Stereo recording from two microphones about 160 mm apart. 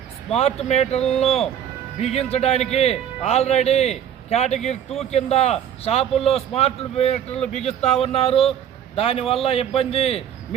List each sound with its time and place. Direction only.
0.3 s a man's voice: 40° left (ahead or behind)